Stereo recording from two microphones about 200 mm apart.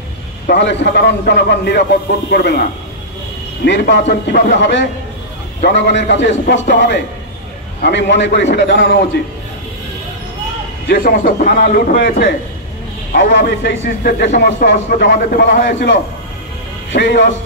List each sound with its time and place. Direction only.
0.5 s a man's voice: 60° left (ahead or behind)
3.6 s a man's voice: 60° left (ahead or behind)
10.9 s a man's voice: 45° left (ahead or behind)